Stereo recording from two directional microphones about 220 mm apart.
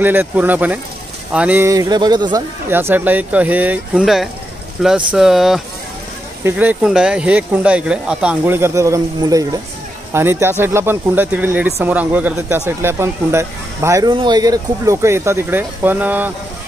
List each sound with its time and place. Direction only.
0.0 s speech: 10° right (ahead or behind)